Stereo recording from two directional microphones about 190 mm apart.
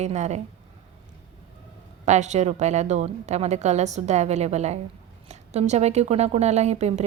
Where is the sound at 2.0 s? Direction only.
40° right (ahead or behind).